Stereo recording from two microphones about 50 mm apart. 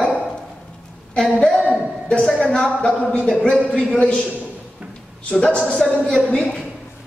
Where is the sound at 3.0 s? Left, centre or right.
Centre.